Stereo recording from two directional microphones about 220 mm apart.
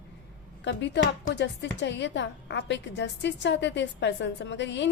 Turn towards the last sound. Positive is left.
turn(degrees=55)  # may be behind; listen again after turning